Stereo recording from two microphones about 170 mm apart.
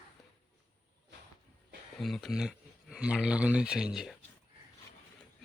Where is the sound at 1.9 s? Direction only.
Centre (ahead or behind).